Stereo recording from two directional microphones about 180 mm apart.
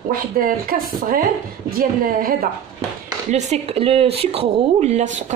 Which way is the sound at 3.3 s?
40° right (ahead or behind).